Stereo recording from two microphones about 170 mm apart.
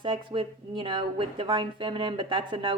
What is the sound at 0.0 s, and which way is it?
Speech, 30° right (ahead or behind).